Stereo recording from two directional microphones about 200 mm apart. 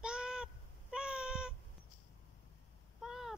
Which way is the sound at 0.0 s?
5° right (ahead or behind).